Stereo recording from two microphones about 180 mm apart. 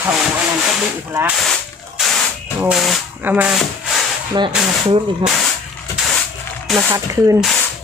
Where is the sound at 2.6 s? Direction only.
5° right (ahead or behind).